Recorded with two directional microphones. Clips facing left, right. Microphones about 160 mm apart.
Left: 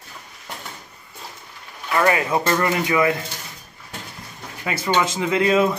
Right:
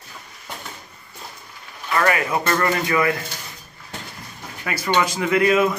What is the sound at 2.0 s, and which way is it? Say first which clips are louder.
A man's voice: left 1 dB; 25° left (ahead or behind).